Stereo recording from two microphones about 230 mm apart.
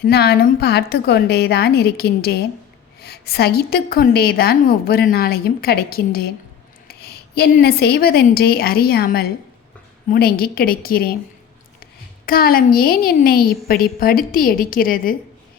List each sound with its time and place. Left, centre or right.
0.0 s a woman's voice: left
12.2 s a woman's voice: left